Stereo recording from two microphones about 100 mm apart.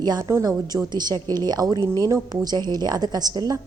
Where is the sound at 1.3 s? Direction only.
40° right (ahead or behind).